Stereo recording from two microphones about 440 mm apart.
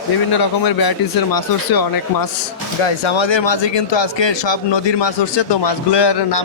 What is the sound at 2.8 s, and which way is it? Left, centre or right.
Speech, left.